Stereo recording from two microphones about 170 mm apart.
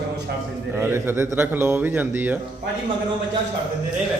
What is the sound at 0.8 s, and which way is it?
Speech, 15° right (ahead or behind).